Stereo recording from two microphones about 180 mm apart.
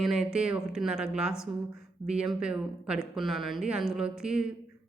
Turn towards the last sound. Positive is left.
turn(degrees=-5)  # may be behind; listen again after turning